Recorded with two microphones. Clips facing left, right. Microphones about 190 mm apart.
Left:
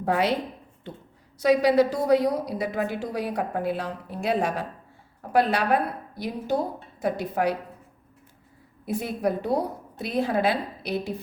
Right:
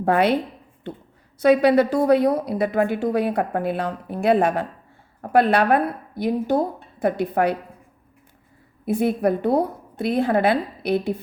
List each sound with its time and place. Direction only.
0.0 s a woman's voice: 60° right (ahead or behind)
8.9 s a woman's voice: 55° right (ahead or behind)